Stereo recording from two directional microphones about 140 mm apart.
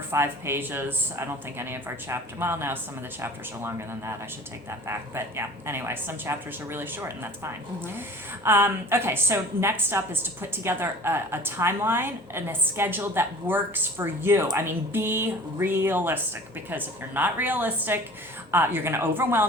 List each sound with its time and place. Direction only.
0.1 s a woman's voice: 15° right (ahead or behind)